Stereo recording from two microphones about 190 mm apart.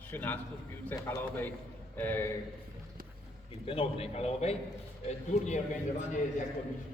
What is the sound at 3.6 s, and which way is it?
A man's voice, 30° left (ahead or behind).